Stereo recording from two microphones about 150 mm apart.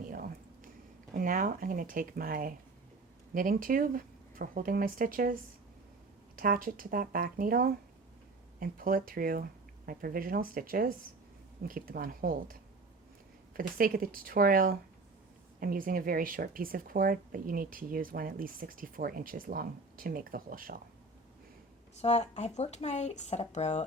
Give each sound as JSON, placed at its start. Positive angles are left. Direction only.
{"t": 0.1, "sound": "a sound", "side_deg": -65}
{"t": 1.1, "sound": "speech", "side_deg": -65}
{"t": 6.4, "sound": "speech", "side_deg": -70}
{"t": 21.9, "sound": "speech", "side_deg": 45}